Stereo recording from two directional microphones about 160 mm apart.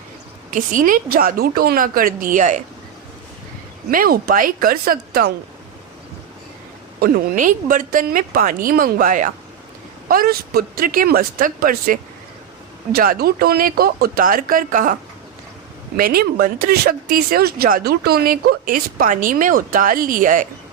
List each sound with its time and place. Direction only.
0.5 s speech: 55° right (ahead or behind)
3.9 s a woman's voice: 65° right (ahead or behind)
7.0 s speech: 60° right (ahead or behind)
10.1 s speech: 65° right (ahead or behind)
16.0 s speech: 70° right (ahead or behind)